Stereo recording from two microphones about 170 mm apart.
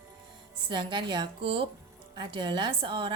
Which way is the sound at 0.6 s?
25° right (ahead or behind).